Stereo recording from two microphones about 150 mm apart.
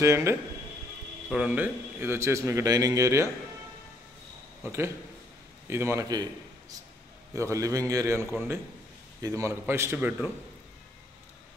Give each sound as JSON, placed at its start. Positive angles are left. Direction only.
{"t": 0.0, "sound": "a man's voice", "side_deg": -20}
{"t": 1.3, "sound": "a man's voice", "side_deg": -5}
{"t": 4.6, "sound": "a man's voice", "side_deg": -15}
{"t": 7.3, "sound": "a man's voice", "side_deg": -20}
{"t": 9.4, "sound": "a man's voice", "side_deg": -15}